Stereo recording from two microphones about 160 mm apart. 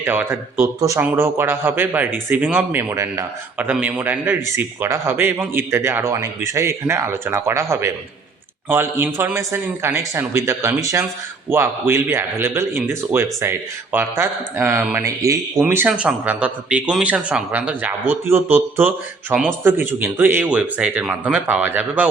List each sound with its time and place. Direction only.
0.0 s speech: 15° right (ahead or behind)